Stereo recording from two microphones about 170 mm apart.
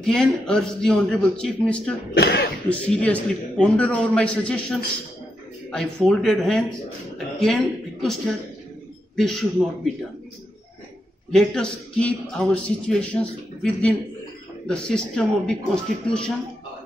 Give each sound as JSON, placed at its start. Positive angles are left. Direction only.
{"t": 0.0, "sound": "a man's voice", "side_deg": 5}
{"t": 2.1, "sound": "speech", "side_deg": 75}
{"t": 2.7, "sound": "a man's voice", "side_deg": 5}
{"t": 11.3, "sound": "a man's voice", "side_deg": 5}